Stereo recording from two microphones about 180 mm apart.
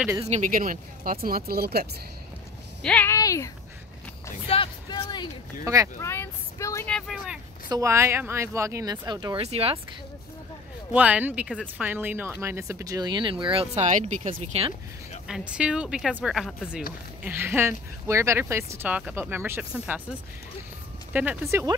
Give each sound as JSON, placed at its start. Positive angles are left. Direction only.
{"t": 0.2, "sound": "speech", "side_deg": -40}
{"t": 2.8, "sound": "speech", "side_deg": 10}
{"t": 3.2, "sound": "speech", "side_deg": 20}
{"t": 6.9, "sound": "speech", "side_deg": 0}
{"t": 7.7, "sound": "speech", "side_deg": -15}
{"t": 10.9, "sound": "speech", "side_deg": -10}
{"t": 15.2, "sound": "speech", "side_deg": -5}
{"t": 21.1, "sound": "speech", "side_deg": -10}